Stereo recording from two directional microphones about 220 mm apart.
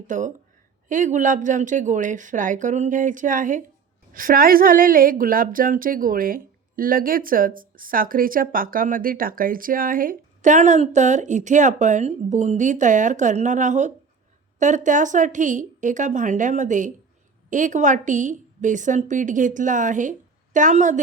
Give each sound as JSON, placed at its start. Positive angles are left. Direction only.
{"t": 0.1, "sound": "a woman's voice", "side_deg": -35}